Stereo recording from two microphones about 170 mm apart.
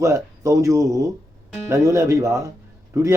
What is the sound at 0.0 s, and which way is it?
Speech, 20° right (ahead or behind).